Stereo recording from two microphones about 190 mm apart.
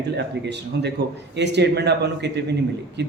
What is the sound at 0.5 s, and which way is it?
A man's voice, 65° right (ahead or behind).